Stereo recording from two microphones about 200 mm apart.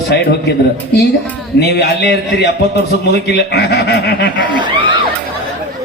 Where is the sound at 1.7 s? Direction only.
55° left (ahead or behind).